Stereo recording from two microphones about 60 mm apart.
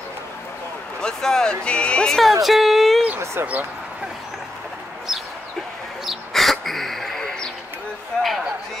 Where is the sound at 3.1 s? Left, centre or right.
Right.